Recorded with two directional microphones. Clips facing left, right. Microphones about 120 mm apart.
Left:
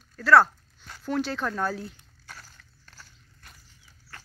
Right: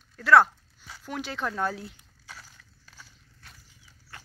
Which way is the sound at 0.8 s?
5° right (ahead or behind).